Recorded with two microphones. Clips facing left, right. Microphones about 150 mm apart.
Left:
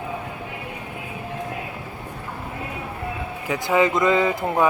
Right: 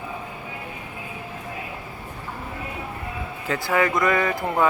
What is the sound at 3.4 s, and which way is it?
Speech, 15° left (ahead or behind).